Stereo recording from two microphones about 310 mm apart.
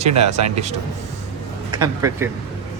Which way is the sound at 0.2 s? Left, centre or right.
Right.